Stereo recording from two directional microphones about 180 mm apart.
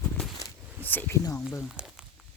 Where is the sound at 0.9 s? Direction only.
10° left (ahead or behind).